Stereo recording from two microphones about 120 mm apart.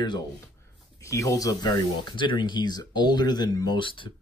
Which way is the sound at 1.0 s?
25° left (ahead or behind).